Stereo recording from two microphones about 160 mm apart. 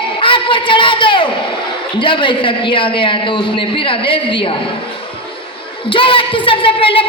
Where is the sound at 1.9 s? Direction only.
30° left (ahead or behind).